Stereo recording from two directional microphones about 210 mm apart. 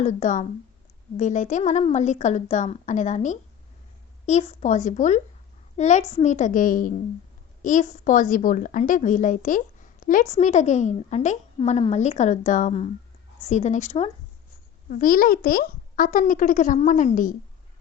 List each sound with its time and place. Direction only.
0.0 s a woman's voice: 35° left (ahead or behind)